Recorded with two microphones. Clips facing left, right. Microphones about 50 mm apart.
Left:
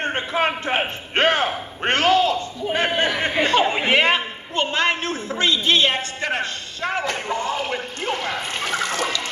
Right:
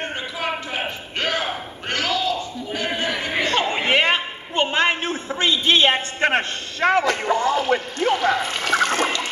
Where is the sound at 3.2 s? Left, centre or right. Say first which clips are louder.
Left 3 dB; left.